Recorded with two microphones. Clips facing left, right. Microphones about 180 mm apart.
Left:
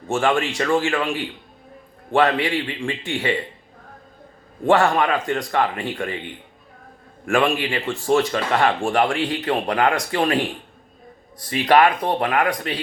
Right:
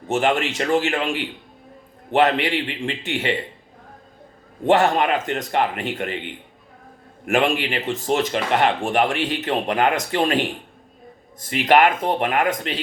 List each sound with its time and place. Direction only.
0.1 s speech: 20° right (ahead or behind)
4.6 s speech: 20° right (ahead or behind)
7.3 s speech: 20° right (ahead or behind)
12.0 s speech: 20° right (ahead or behind)